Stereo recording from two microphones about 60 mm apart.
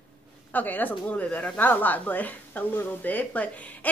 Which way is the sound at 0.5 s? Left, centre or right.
Left.